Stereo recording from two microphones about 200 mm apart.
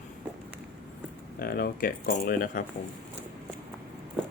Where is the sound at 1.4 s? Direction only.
50° left (ahead or behind).